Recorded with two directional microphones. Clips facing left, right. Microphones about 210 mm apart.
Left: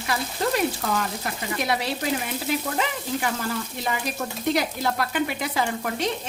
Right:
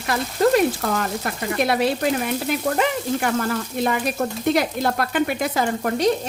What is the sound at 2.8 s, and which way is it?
Frying, 55° right (ahead or behind).